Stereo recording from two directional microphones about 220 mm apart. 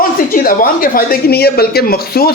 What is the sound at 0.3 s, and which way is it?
Speech, 40° left (ahead or behind).